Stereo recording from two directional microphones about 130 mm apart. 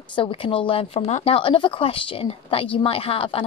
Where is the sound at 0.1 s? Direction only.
40° left (ahead or behind).